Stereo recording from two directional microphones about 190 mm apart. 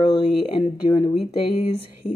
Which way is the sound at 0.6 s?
25° left (ahead or behind).